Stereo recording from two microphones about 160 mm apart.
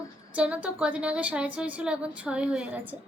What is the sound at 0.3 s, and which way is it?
A woman's voice, 10° right (ahead or behind).